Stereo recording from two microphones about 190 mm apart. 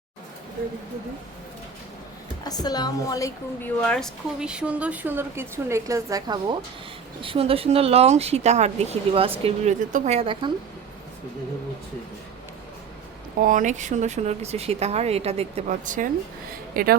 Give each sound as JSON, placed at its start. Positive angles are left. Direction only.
{"t": 2.4, "sound": "speech", "side_deg": 20}
{"t": 3.8, "sound": "a woman's voice", "side_deg": 5}
{"t": 13.4, "sound": "speech", "side_deg": -45}